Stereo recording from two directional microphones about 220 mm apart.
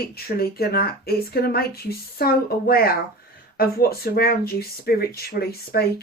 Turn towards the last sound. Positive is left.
turn(degrees=45)  # may be behind; listen again after turning